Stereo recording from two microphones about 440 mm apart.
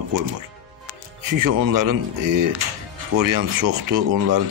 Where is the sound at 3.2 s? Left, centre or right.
Right.